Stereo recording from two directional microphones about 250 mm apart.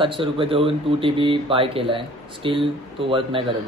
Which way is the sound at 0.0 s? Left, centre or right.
Right.